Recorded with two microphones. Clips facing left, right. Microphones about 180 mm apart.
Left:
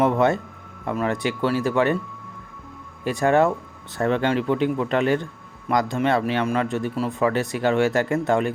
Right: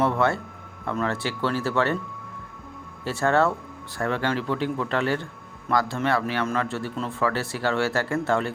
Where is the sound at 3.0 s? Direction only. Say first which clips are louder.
Left 3 dB; 15° left (ahead or behind).